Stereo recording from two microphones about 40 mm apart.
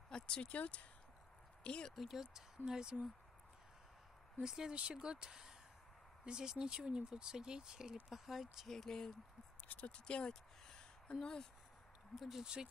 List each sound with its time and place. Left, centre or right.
0.1 s a sound: left
0.5 s speech: left
1.6 s speech: left
2.0 s speech: centre
4.4 s speech: centre
8.6 s speech: centre
9.8 s speech: left
12.2 s speech: centre